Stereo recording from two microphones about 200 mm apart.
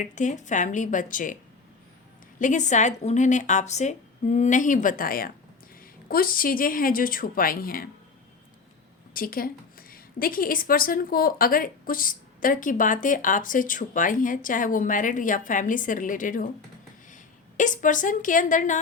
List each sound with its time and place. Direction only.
0.0 s speech: 40° left (ahead or behind)
2.4 s a woman's voice: 35° left (ahead or behind)
9.1 s a woman's voice: 45° left (ahead or behind)
17.6 s speech: 40° left (ahead or behind)